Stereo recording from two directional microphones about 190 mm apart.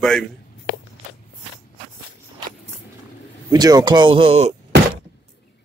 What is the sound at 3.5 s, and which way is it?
Speech, 20° right (ahead or behind).